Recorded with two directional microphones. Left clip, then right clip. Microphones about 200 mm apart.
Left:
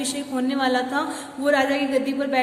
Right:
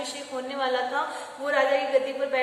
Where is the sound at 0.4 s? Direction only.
55° left (ahead or behind).